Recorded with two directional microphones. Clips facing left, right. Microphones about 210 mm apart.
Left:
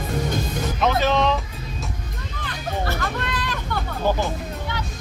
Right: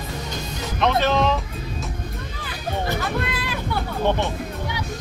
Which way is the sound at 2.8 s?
15° right (ahead or behind).